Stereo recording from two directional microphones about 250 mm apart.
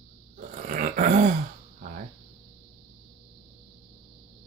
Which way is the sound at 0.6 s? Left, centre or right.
Right.